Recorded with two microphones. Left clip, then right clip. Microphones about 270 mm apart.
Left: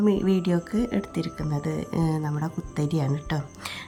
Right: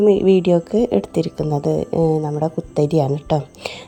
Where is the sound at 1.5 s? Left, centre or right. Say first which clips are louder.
Right 13 dB; right.